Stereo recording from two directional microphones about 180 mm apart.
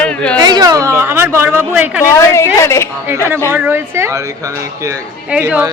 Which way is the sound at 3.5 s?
10° right (ahead or behind).